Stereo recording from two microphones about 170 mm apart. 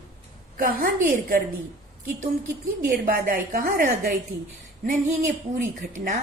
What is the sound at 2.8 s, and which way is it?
A woman's voice, 60° right (ahead or behind).